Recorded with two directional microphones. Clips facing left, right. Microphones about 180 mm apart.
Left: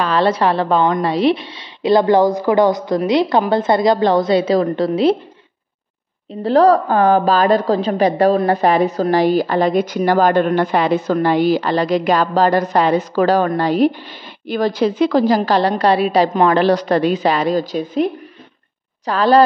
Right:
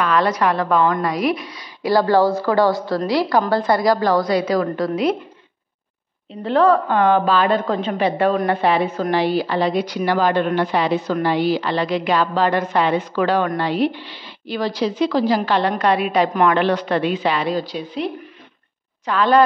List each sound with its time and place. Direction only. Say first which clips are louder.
0.0 s a woman's voice: left 3 dB; 30° left (ahead or behind)
6.4 s a woman's voice: left 4 dB; 35° left (ahead or behind)
19.0 s a woman's voice: left 3 dB; 35° left (ahead or behind)